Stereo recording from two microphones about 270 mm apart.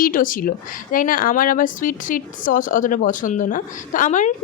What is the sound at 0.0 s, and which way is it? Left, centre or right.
Speech, left.